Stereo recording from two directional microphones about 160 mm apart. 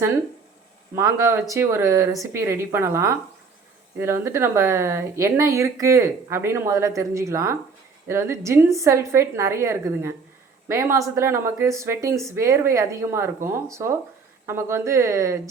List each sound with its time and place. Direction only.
0.9 s speech: 20° right (ahead or behind)